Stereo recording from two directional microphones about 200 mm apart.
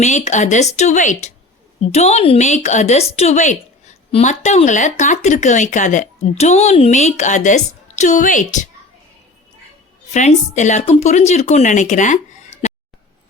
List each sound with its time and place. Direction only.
0.0 s a woman's voice: 35° left (ahead or behind)
10.1 s a woman's voice: 35° left (ahead or behind)